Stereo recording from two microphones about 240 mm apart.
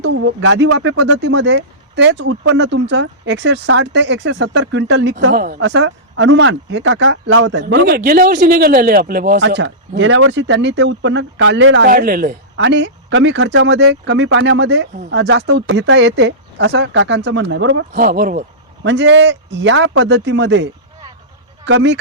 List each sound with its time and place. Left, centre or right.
0.0 s speech: right
5.3 s speech: right
9.4 s speech: right
11.9 s speech: right
12.6 s speech: right
17.9 s speech: right
18.8 s speech: right